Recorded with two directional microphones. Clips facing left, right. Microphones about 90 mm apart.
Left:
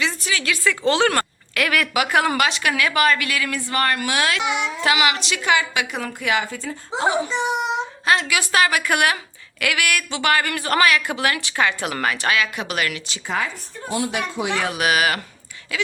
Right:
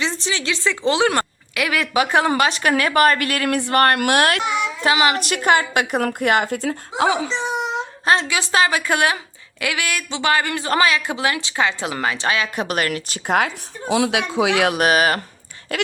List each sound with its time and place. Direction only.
0.0 s a woman's voice: 30° right (ahead or behind)
2.5 s a woman's voice: 40° right (ahead or behind)
4.8 s speech: 35° right (ahead or behind)
5.2 s a woman's voice: 50° right (ahead or behind); by 7.3 s 90° right
8.0 s a woman's voice: 30° right (ahead or behind)
12.6 s a woman's voice: 45° right (ahead or behind)
13.2 s speech: 70° right (ahead or behind)
14.8 s speech: 40° right (ahead or behind)
15.7 s a sound: 55° right (ahead or behind)